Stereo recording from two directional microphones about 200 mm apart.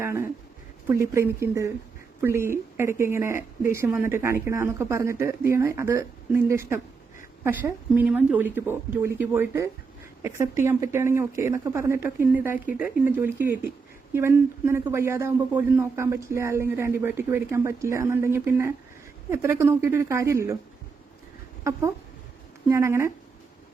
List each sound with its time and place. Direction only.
0.0 s speech: 15° right (ahead or behind)
21.6 s speech: 15° right (ahead or behind)